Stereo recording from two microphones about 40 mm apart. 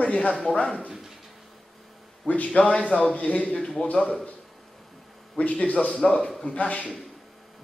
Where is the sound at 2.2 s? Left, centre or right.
Left.